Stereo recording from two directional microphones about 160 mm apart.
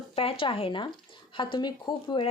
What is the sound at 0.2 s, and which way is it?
Speech, 35° left (ahead or behind).